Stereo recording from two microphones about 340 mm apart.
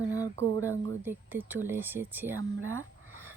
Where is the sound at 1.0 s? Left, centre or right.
Centre.